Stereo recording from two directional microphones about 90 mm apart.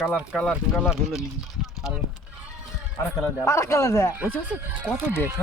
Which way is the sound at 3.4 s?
35° left (ahead or behind).